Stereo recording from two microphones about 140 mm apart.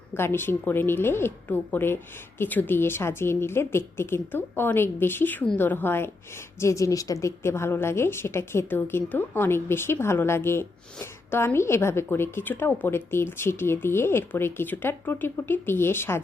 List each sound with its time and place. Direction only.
0.1 s a woman's voice: 15° left (ahead or behind)